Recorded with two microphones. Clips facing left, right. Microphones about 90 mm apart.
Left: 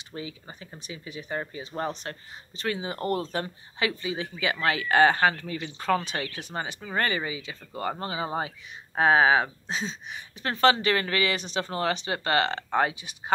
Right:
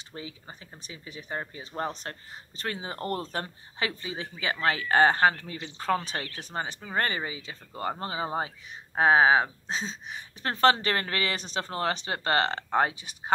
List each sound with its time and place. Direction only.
0.1 s speech: 35° right (ahead or behind)
1.7 s speech: 10° right (ahead or behind)
2.0 s speech: 40° right (ahead or behind)
7.7 s speech: 25° right (ahead or behind)